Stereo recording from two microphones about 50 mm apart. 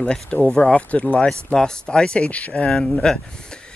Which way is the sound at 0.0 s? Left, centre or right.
Left.